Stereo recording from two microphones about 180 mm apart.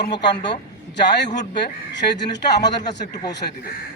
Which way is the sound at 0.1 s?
70° left (ahead or behind).